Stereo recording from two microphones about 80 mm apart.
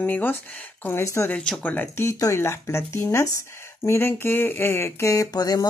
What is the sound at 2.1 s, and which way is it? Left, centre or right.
Speech, left.